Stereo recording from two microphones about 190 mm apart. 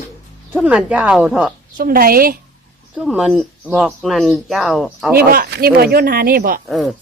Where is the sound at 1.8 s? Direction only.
50° right (ahead or behind).